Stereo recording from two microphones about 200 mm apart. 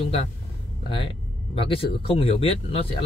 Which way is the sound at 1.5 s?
25° left (ahead or behind).